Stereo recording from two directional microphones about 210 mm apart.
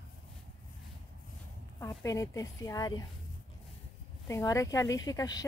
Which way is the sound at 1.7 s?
15° left (ahead or behind).